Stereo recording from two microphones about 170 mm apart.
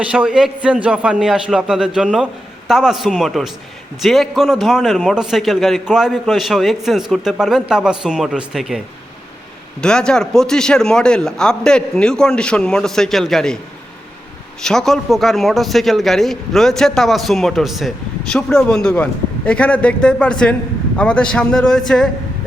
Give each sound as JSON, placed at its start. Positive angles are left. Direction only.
{"t": 0.0, "sound": "a man's voice", "side_deg": -5}
{"t": 9.8, "sound": "a man's voice", "side_deg": 5}
{"t": 14.6, "sound": "a man's voice", "side_deg": 0}